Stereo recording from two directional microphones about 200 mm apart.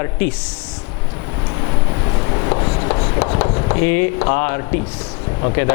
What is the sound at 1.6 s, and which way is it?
Writing, 25° left (ahead or behind).